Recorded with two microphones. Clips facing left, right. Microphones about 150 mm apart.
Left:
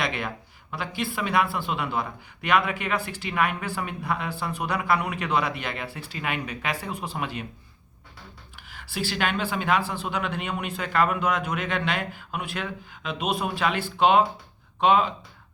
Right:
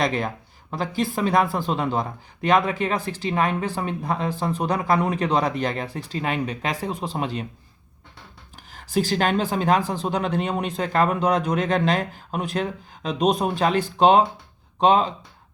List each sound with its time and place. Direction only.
0.0 s speech: 40° right (ahead or behind)
8.5 s speech: 40° right (ahead or behind)